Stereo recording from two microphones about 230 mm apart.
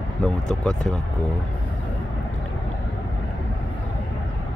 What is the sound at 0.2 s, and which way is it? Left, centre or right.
Speech, centre.